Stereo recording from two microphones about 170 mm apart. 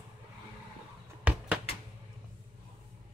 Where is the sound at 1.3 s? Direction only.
5° right (ahead or behind).